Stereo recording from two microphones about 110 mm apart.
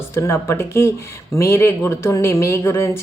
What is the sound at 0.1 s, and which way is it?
A woman's voice, 25° left (ahead or behind).